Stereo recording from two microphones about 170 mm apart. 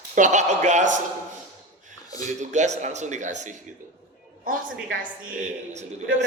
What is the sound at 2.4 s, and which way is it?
Speech, 45° right (ahead or behind).